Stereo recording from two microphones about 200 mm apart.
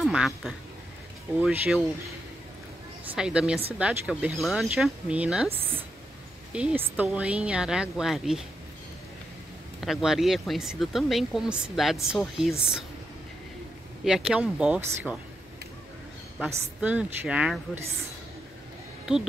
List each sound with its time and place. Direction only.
0.0 s speech: centre (ahead or behind)
3.2 s speech: 5° right (ahead or behind)
9.8 s speech: centre (ahead or behind)
14.0 s speech: 5° right (ahead or behind)
16.3 s a woman's voice: 5° right (ahead or behind)